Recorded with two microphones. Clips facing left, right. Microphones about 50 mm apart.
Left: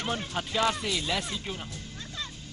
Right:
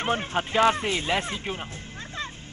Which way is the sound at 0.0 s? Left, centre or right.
Right.